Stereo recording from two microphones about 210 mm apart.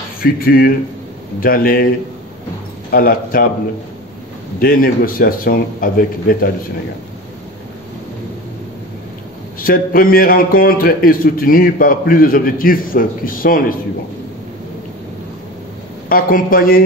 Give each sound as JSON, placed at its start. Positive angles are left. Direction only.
{"t": 0.2, "sound": "a man's voice", "side_deg": 45}
{"t": 2.9, "sound": "a man's voice", "side_deg": 45}
{"t": 4.6, "sound": "a man's voice", "side_deg": 45}
{"t": 9.6, "sound": "a man's voice", "side_deg": 45}
{"t": 16.1, "sound": "a man's voice", "side_deg": 40}